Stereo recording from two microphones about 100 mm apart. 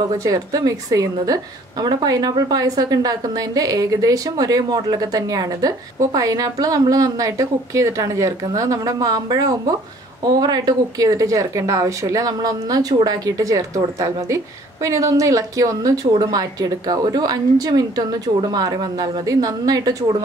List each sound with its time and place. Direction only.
0.2 s a woman's voice: 35° right (ahead or behind)